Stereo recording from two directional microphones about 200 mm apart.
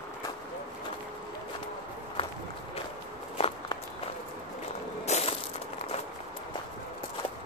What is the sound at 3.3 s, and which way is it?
Walk, 30° left (ahead or behind).